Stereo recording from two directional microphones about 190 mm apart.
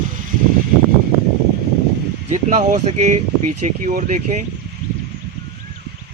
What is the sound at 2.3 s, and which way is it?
Speech, 40° right (ahead or behind).